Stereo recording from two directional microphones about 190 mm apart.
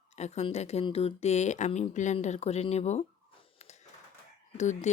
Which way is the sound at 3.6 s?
35° left (ahead or behind).